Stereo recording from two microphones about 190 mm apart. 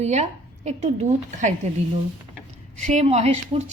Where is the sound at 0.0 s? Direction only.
35° right (ahead or behind).